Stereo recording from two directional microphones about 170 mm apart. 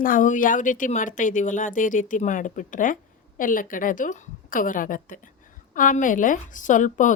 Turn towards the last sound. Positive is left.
turn(degrees=50)  # may be behind; listen again after turning